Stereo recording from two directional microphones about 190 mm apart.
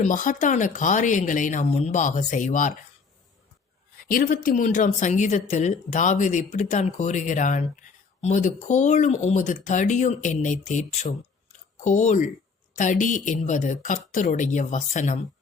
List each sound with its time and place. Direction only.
0.0 s a woman's voice: 45° left (ahead or behind)
4.1 s a woman's voice: 45° left (ahead or behind)